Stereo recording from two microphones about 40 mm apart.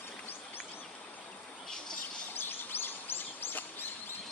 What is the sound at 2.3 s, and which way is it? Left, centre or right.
Bird vocalization, left.